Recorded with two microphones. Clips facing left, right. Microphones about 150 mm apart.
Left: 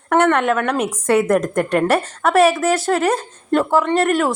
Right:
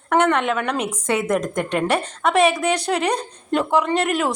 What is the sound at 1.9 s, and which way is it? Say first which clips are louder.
A woman's voice: left 3 dB; 5° left (ahead or behind).